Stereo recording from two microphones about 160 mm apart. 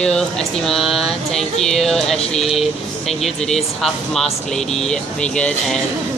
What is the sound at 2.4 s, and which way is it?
Speech, centre (ahead or behind).